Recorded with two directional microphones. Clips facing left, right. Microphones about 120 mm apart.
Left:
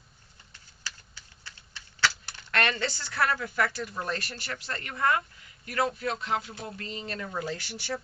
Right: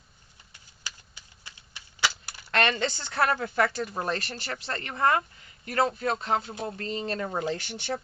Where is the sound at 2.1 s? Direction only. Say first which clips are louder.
Even; 10° right (ahead or behind).